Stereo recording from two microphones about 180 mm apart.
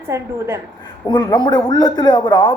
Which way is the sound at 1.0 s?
25° left (ahead or behind).